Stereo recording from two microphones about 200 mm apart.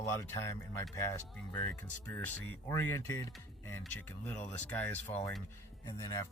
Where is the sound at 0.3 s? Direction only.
15° left (ahead or behind).